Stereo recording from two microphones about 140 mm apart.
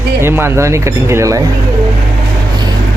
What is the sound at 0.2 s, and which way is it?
Speech, 15° right (ahead or behind).